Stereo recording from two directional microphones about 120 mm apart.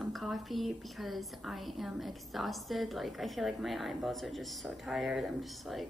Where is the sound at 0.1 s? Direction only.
Centre (ahead or behind).